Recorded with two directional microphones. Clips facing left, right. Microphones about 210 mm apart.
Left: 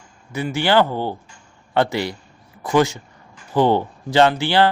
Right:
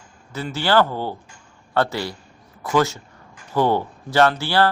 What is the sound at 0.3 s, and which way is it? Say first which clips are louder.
Speech: left 2 dB; 15° left (ahead or behind).